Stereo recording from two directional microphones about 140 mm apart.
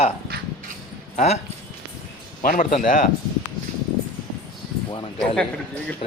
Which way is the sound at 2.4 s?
75° left (ahead or behind).